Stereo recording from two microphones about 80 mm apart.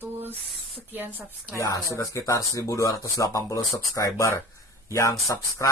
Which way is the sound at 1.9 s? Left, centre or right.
Left.